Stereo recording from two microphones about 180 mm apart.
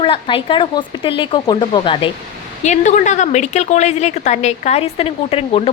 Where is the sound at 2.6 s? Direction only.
40° left (ahead or behind).